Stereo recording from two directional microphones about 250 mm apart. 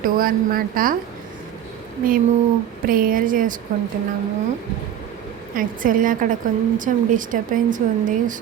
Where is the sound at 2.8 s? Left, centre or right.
Right.